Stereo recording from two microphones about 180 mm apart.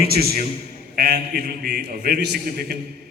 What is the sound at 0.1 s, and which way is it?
A man's voice, 60° right (ahead or behind).